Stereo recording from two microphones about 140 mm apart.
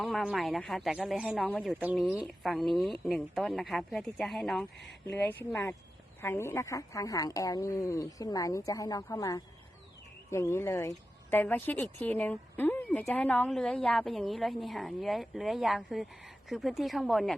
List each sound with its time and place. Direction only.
0.0 s speech: centre (ahead or behind)
5.0 s speech: 15° left (ahead or behind)